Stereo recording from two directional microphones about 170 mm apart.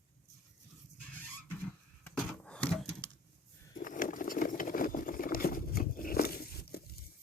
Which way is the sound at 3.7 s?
50° left (ahead or behind).